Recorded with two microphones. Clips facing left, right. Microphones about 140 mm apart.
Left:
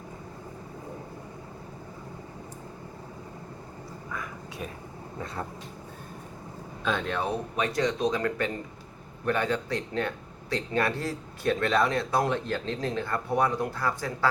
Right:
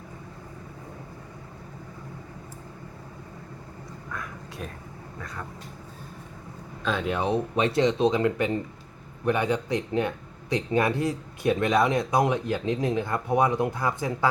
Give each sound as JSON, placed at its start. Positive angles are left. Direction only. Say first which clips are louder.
{"t": 4.1, "sound": "a sound", "louder": "even", "side_deg": 0}
{"t": 5.2, "sound": "speech", "louder": "left 3 dB", "side_deg": 30}
{"t": 6.8, "sound": "speech", "louder": "right 2 dB", "side_deg": -5}
{"t": 7.3, "sound": "speech", "louder": "right 5 dB", "side_deg": -25}